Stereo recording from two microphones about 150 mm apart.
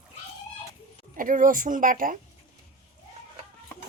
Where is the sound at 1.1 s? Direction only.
65° right (ahead or behind).